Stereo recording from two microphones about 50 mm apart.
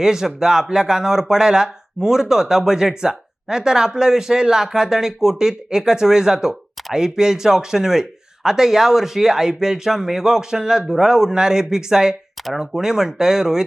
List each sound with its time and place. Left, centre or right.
0.0 s speech: centre